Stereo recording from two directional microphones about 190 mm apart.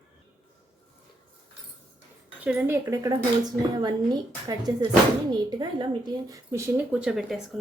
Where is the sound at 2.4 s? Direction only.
10° right (ahead or behind).